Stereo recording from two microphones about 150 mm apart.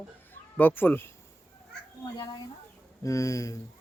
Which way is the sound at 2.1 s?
25° left (ahead or behind).